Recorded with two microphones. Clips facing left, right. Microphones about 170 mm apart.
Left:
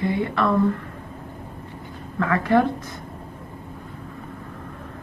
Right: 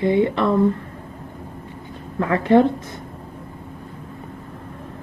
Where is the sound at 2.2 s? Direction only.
25° right (ahead or behind).